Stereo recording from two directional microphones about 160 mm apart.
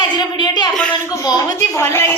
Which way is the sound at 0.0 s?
30° left (ahead or behind).